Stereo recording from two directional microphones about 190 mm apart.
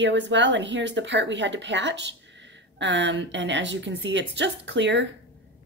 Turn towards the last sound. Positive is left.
turn(degrees=-70)  # may be behind; listen again after turning